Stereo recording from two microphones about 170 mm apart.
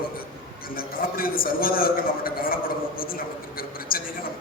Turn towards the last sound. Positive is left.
turn(degrees=60)  # may be behind; listen again after turning